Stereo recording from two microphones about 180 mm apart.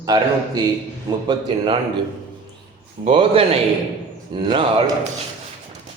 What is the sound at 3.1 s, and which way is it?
A man's voice, 30° right (ahead or behind).